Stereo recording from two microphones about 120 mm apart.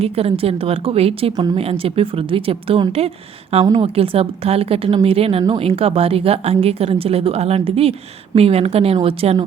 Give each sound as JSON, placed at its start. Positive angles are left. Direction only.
{"t": 0.0, "sound": "a woman's voice", "side_deg": -55}